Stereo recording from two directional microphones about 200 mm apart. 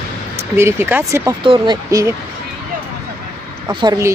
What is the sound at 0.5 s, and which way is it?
Speech, 10° right (ahead or behind).